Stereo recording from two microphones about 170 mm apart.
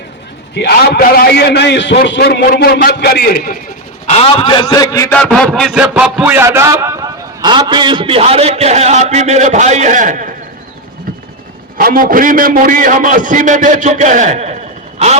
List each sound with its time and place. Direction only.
0.5 s a man's voice: 70° left (ahead or behind)
4.0 s a man's voice: 35° left (ahead or behind); by 5.0 s 20° left (ahead or behind)
5.1 s a man's voice: 5° left (ahead or behind); by 10.2 s 50° right (ahead or behind)
11.8 s a man's voice: 60° right (ahead or behind); by 14.5 s 40° right (ahead or behind)